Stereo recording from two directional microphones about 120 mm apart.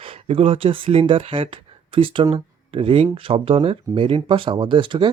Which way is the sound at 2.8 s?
50° right (ahead or behind).